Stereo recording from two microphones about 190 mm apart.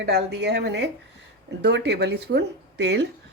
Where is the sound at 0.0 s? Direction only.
60° right (ahead or behind).